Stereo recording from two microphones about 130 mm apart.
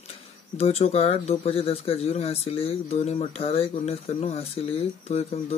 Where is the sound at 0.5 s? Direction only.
50° left (ahead or behind).